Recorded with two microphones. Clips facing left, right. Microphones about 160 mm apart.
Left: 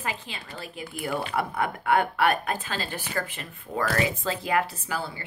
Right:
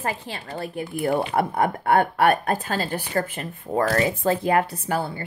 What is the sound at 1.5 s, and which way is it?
A woman's voice, 35° right (ahead or behind).